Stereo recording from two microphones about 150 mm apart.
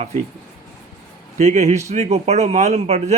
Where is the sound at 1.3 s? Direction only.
50° right (ahead or behind).